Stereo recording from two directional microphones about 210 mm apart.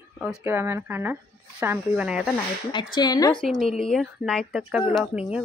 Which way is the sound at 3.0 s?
20° left (ahead or behind).